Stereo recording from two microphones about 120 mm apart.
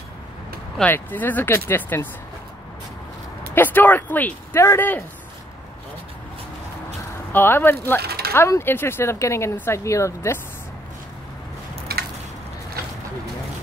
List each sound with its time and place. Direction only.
0.8 s speech: 15° left (ahead or behind)
3.5 s speech: 15° left (ahead or behind)
7.3 s speech: 20° left (ahead or behind)